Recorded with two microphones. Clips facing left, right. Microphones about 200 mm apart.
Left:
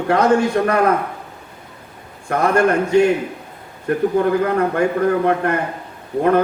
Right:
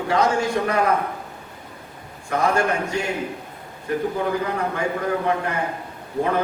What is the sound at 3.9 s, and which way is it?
A man's voice, 60° left (ahead or behind).